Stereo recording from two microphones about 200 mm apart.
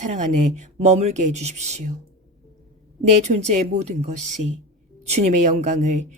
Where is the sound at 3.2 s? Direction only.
35° right (ahead or behind).